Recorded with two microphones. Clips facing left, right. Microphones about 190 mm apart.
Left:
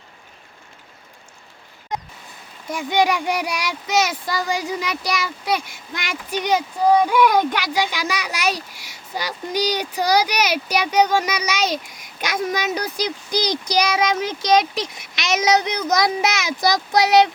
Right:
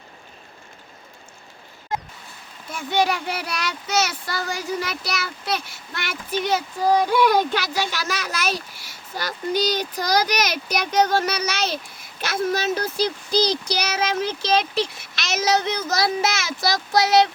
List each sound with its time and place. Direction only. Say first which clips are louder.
2.7 s speech: left 3 dB; 15° left (ahead or behind)
7.6 s speech: left 3 dB; 15° left (ahead or behind)